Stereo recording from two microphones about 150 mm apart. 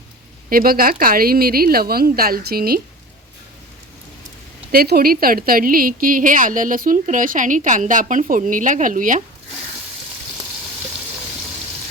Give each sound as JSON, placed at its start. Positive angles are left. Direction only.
{"t": 0.5, "sound": "a woman's voice", "side_deg": -75}
{"t": 4.7, "sound": "a woman's voice", "side_deg": -90}